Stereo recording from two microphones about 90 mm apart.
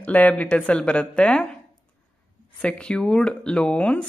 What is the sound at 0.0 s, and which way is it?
A woman's voice, 20° left (ahead or behind).